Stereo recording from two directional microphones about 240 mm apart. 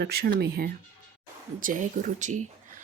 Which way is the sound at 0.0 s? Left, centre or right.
Right.